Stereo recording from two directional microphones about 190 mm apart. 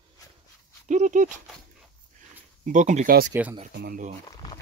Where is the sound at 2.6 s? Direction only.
40° right (ahead or behind).